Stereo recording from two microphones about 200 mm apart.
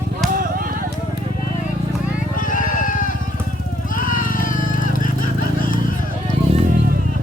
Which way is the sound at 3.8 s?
40° left (ahead or behind).